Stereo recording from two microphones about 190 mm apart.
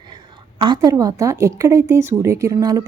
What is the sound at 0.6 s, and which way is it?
A woman's voice, 20° right (ahead or behind).